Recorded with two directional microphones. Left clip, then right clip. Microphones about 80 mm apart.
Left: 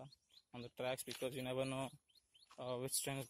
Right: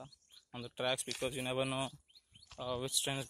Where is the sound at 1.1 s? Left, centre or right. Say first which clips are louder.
Right 6 dB; left.